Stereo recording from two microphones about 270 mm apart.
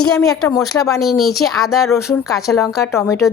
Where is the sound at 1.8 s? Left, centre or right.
Centre.